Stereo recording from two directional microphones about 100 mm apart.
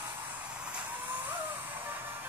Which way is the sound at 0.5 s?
15° right (ahead or behind).